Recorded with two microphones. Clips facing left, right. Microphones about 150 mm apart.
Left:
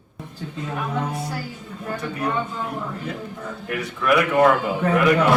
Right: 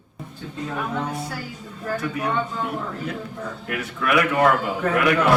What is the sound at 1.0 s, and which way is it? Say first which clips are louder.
Speech: left 1 dB; 5° left (ahead or behind).